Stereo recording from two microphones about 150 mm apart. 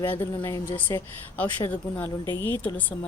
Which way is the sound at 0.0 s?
15° left (ahead or behind).